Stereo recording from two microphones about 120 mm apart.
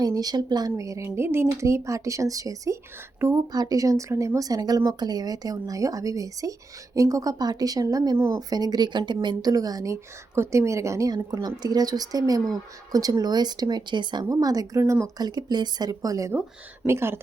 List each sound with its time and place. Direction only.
0.0 s speech: 35° right (ahead or behind)